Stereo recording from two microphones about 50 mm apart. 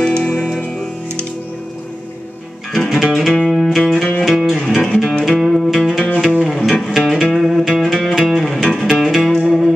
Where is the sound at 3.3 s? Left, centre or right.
Centre.